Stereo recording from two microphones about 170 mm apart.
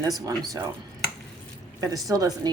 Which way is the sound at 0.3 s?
20° right (ahead or behind).